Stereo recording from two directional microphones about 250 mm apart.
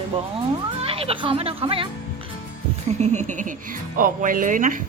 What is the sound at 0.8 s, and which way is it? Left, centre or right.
Speech, right.